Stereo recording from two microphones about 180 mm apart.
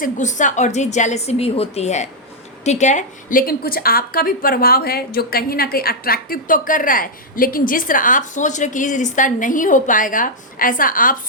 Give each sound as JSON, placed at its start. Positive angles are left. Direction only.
{"t": 0.0, "sound": "a woman's voice", "side_deg": 45}